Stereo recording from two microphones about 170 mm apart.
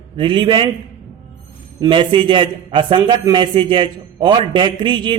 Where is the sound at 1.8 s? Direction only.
30° right (ahead or behind).